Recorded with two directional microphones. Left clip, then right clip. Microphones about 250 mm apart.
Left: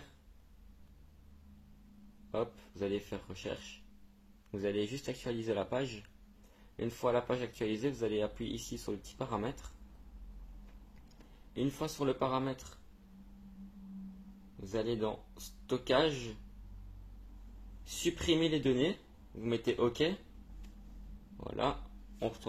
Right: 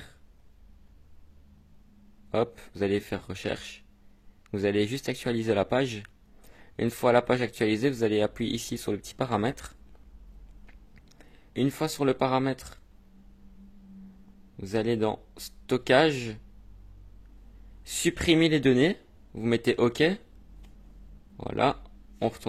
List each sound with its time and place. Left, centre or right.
2.3 s speech: right
11.5 s speech: right
14.6 s speech: right
18.0 s speech: right
21.4 s speech: right